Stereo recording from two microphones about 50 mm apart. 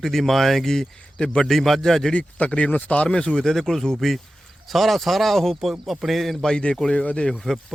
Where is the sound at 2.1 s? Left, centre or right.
Left; by 6.4 s centre.